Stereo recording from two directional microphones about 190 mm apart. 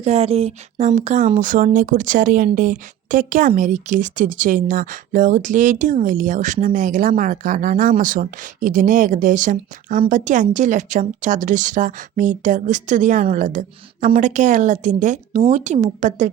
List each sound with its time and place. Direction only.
0.0 s a woman's voice: 35° right (ahead or behind)